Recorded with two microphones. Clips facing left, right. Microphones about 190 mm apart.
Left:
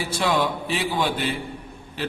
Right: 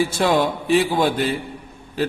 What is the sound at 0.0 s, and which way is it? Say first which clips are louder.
Mantra: right 5 dB; 45° right (ahead or behind).